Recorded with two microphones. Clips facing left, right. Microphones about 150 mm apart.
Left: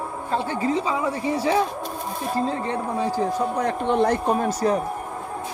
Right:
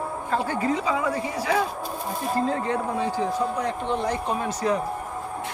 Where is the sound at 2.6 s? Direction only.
35° left (ahead or behind).